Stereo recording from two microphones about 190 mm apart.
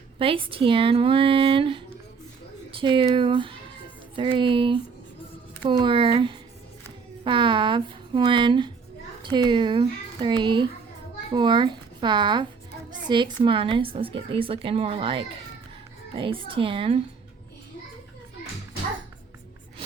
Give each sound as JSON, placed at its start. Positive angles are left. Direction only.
{"t": 0.2, "sound": "speech", "side_deg": -30}